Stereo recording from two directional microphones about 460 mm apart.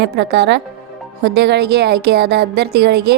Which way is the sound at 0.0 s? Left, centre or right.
Right.